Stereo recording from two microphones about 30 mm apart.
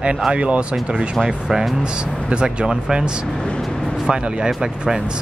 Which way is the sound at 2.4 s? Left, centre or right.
Right.